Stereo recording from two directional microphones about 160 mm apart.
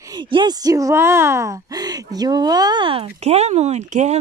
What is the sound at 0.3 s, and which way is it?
Speech, 25° right (ahead or behind).